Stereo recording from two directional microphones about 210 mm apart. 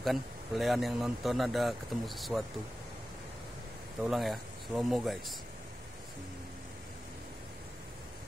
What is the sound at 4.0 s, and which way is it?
Speech, centre (ahead or behind).